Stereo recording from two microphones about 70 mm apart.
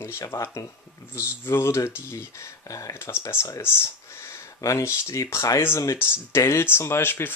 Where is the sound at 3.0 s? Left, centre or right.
Left.